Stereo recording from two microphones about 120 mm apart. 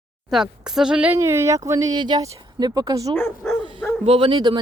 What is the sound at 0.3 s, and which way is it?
Speech, 5° right (ahead or behind).